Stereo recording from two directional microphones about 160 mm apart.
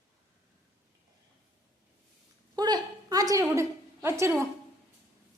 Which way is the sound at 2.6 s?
25° right (ahead or behind).